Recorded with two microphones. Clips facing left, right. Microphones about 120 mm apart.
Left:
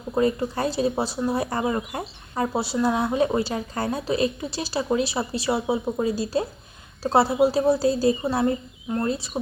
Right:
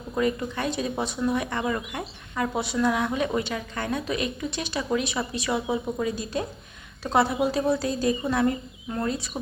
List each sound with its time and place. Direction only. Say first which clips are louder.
0.1 s speech: left 3 dB; 30° left (ahead or behind)